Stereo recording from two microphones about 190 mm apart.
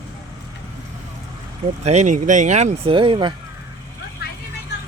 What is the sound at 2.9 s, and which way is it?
Speech, 25° right (ahead or behind).